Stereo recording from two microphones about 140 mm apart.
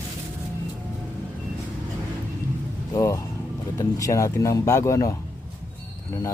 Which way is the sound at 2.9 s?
20° left (ahead or behind).